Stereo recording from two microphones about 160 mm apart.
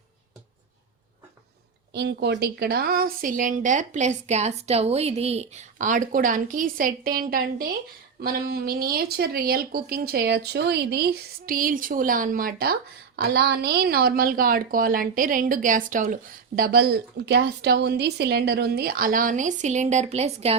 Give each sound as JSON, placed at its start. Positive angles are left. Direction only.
{"t": 1.9, "sound": "a woman's voice", "side_deg": -90}
{"t": 13.1, "sound": "a woman's voice", "side_deg": -90}
{"t": 16.6, "sound": "speech", "side_deg": -75}